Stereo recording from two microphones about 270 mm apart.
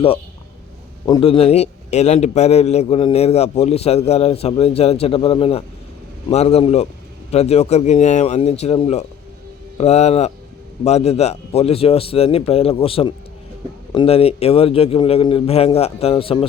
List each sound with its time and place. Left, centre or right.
1.0 s a man's voice: centre